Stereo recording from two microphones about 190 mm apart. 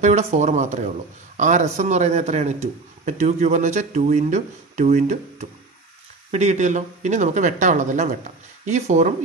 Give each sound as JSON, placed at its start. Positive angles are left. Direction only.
{"t": 0.0, "sound": "speech", "side_deg": -35}